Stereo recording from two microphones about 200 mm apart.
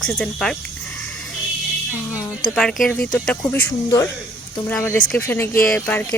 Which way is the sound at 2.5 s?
Centre (ahead or behind).